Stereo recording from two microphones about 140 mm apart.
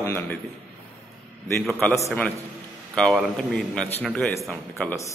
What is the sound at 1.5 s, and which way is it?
Speech, 5° left (ahead or behind).